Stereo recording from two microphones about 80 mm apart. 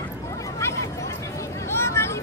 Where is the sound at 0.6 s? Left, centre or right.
Left.